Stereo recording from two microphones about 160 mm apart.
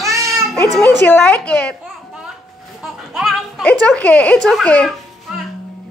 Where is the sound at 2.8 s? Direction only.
Centre (ahead or behind).